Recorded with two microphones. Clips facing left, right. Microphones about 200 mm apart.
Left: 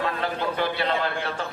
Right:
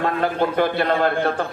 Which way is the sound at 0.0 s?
50° right (ahead or behind).